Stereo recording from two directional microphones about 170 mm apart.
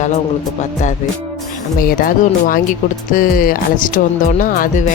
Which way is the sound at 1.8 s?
55° left (ahead or behind).